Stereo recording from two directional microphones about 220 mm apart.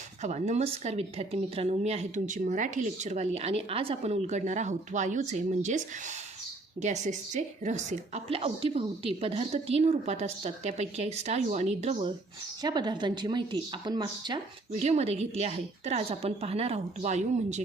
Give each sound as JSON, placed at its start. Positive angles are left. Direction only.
{"t": 0.2, "sound": "speech", "side_deg": -30}
{"t": 6.8, "sound": "a woman's voice", "side_deg": -30}